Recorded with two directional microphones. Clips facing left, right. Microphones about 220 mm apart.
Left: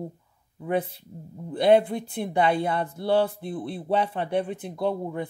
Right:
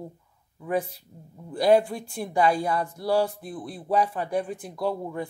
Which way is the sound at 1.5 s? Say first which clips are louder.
Left 1 dB; 20° left (ahead or behind).